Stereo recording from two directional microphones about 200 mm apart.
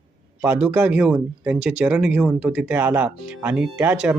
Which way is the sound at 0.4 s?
10° right (ahead or behind).